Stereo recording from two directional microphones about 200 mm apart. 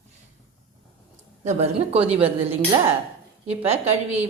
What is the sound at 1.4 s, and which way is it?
Speech, 30° right (ahead or behind).